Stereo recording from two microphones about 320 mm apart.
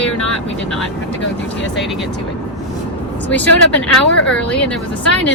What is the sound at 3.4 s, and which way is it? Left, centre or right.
Speech, centre.